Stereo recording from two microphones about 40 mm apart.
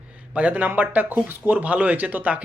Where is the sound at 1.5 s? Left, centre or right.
Right.